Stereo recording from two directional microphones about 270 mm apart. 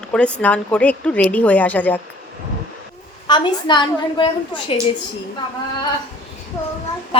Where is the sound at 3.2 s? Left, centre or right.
Centre.